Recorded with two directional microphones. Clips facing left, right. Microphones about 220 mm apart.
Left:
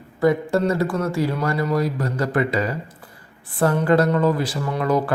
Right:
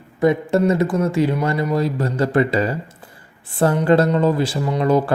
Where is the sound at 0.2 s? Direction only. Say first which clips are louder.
Right 2 dB; 20° right (ahead or behind).